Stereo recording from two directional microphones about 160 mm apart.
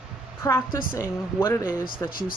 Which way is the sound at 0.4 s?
20° left (ahead or behind).